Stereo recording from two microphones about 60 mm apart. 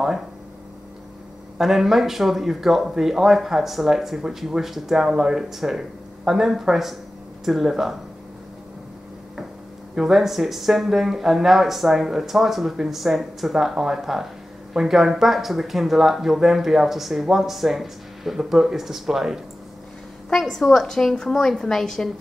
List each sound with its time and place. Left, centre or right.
1.6 s speech: centre
9.9 s speech: centre
20.2 s a woman's voice: centre